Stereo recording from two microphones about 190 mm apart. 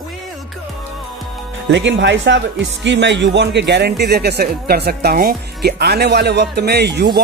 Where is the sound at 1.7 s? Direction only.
70° right (ahead or behind).